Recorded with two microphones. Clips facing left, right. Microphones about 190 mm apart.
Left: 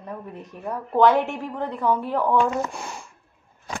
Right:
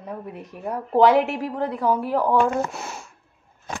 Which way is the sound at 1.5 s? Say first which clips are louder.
Even; 10° right (ahead or behind).